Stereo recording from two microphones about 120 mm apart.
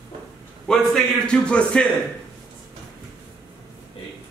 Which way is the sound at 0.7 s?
5° left (ahead or behind).